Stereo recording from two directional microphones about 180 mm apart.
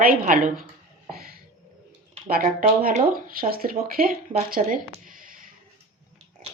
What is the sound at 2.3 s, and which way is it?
Speech, 45° right (ahead or behind).